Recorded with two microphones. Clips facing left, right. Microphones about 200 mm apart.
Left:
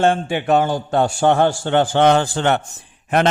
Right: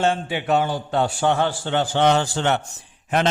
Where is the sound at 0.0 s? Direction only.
50° left (ahead or behind).